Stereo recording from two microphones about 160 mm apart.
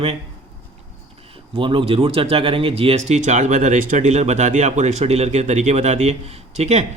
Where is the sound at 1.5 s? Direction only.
35° right (ahead or behind).